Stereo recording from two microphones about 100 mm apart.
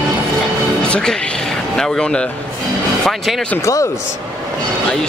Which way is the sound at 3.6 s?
30° left (ahead or behind).